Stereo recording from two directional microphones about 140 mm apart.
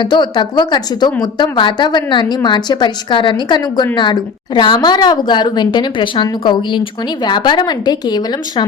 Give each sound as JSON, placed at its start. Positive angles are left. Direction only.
{"t": 0.0, "sound": "a woman's voice", "side_deg": 35}